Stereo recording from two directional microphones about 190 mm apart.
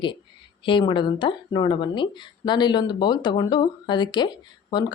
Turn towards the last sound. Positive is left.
turn(degrees=25)  # may be behind; listen again after turning